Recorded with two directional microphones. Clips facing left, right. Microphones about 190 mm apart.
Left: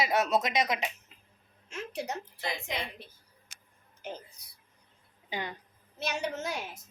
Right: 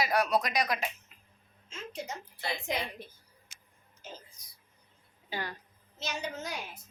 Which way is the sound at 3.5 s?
60° left (ahead or behind).